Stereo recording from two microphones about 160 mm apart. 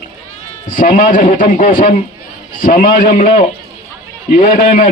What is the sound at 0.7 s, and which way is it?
Speech, 60° left (ahead or behind).